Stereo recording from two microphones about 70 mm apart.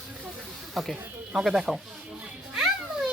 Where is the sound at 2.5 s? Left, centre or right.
Centre.